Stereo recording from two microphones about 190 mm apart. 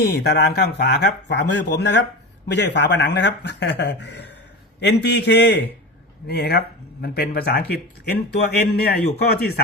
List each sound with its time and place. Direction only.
0.0 s speech: 60° left (ahead or behind)